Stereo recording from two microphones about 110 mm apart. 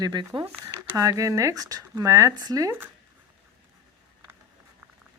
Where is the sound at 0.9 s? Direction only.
30° right (ahead or behind).